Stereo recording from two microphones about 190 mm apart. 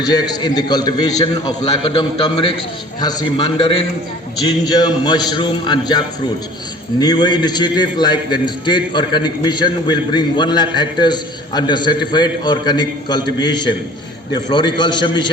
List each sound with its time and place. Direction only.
0.0 s a man's voice: 20° left (ahead or behind)
7.0 s a man's voice: 20° left (ahead or behind)